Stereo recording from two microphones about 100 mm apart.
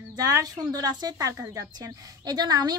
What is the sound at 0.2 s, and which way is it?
A woman's voice, 35° right (ahead or behind).